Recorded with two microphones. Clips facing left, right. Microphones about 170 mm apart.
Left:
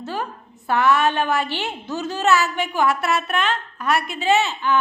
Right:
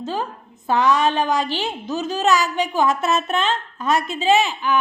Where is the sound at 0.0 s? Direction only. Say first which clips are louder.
Right 2 dB; 20° right (ahead or behind).